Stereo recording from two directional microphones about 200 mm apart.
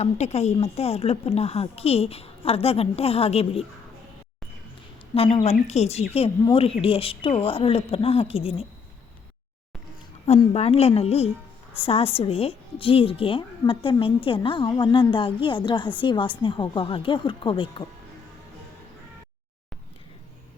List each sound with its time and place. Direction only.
0.0 s a woman's voice: 35° left (ahead or behind)
5.1 s a woman's voice: 30° left (ahead or behind)
10.2 s a woman's voice: 30° left (ahead or behind)